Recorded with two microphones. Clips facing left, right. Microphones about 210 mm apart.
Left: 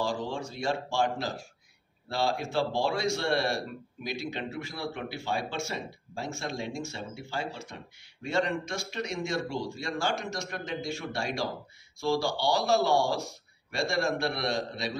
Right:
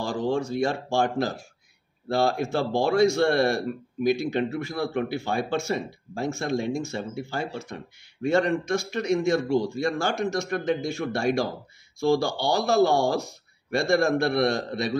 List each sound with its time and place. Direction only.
0.0 s speech: 55° right (ahead or behind)